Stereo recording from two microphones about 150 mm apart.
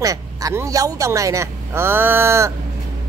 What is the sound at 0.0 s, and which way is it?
Speech, 25° right (ahead or behind).